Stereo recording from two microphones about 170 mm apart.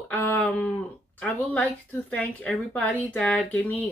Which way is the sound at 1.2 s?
5° left (ahead or behind).